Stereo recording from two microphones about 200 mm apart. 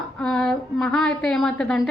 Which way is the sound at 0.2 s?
5° left (ahead or behind).